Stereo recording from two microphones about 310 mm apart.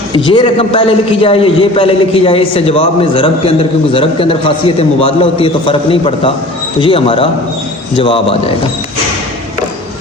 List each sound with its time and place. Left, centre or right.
0.3 s a man's voice: centre